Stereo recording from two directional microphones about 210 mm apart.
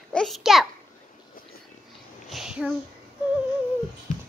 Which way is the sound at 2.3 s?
5° right (ahead or behind).